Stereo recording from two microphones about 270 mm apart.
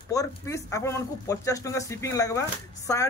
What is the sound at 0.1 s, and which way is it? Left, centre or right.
Speech, centre.